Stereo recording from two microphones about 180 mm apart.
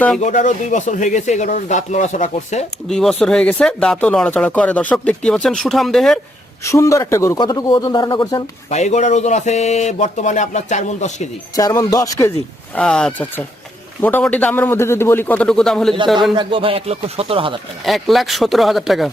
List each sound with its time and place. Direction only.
0.2 s speech: 45° left (ahead or behind)
2.8 s speech: centre (ahead or behind)
6.7 s speech: 15° left (ahead or behind)
8.7 s speech: 40° left (ahead or behind)
11.5 s speech: 20° left (ahead or behind)
12.7 s a man's voice: 5° left (ahead or behind)
16.3 s speech: 25° right (ahead or behind)
17.8 s speech: centre (ahead or behind)